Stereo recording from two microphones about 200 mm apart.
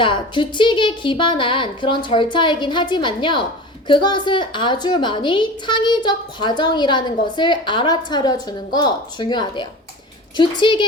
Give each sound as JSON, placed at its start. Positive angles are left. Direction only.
{"t": 0.0, "sound": "a woman's voice", "side_deg": 25}